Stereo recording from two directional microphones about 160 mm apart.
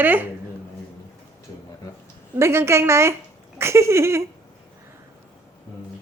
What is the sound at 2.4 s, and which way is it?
A woman's voice, 15° right (ahead or behind).